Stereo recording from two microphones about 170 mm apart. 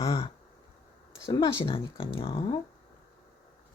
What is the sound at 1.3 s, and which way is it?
Speech, 30° left (ahead or behind).